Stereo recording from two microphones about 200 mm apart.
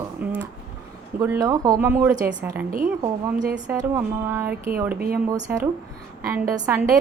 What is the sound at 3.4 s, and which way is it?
Speech, 40° right (ahead or behind).